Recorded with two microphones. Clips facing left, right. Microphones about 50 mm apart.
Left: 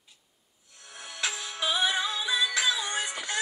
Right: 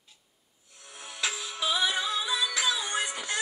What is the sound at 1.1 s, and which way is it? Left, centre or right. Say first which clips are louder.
Music: even; left.